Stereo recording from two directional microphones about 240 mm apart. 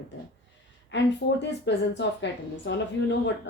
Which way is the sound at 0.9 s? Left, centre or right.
Left.